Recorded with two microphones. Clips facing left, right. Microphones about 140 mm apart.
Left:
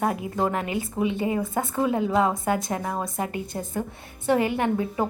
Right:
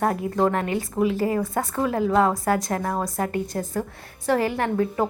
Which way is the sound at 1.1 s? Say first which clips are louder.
Right 2 dB; 20° left (ahead or behind).